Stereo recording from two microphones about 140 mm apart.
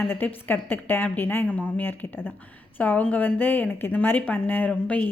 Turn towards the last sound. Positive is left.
turn(degrees=10)  # may be behind; listen again after turning